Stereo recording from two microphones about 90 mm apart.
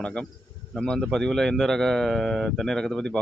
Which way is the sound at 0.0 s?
10° left (ahead or behind).